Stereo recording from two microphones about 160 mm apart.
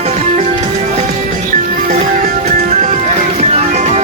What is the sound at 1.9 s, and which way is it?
Music, 45° right (ahead or behind).